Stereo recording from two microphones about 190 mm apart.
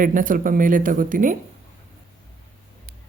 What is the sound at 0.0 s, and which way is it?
Speech, 45° right (ahead or behind).